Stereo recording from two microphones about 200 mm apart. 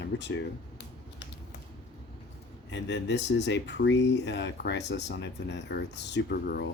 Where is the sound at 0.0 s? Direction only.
60° left (ahead or behind).